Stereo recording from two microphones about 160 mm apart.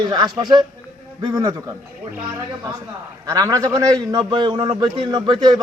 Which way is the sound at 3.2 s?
20° right (ahead or behind).